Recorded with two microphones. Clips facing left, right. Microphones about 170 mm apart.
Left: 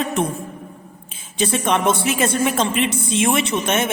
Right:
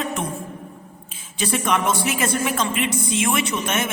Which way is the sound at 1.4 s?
25° left (ahead or behind).